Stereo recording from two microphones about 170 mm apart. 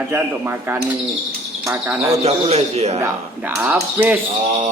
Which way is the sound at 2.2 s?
40° right (ahead or behind).